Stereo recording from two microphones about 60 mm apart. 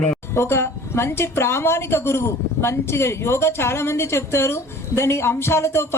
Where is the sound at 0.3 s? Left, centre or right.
Left.